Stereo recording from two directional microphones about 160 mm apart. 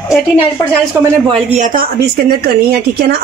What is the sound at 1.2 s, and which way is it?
Speech, 35° right (ahead or behind).